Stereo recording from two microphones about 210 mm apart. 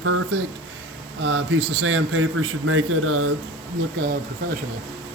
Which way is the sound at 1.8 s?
75° right (ahead or behind).